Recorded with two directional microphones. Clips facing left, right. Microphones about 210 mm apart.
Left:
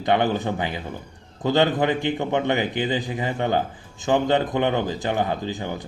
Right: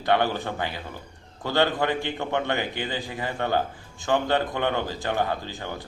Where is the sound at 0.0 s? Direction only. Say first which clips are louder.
Left 3 dB; 20° left (ahead or behind).